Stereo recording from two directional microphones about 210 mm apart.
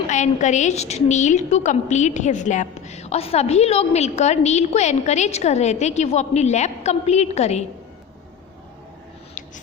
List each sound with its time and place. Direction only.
0.1 s a woman's voice: 35° left (ahead or behind)